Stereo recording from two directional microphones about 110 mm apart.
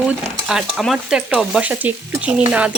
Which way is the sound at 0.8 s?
5° right (ahead or behind).